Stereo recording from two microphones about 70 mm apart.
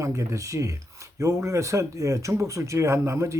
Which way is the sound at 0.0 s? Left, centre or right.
Right.